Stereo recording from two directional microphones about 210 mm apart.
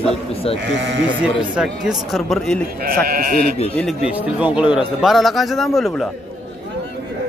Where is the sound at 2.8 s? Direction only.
45° right (ahead or behind).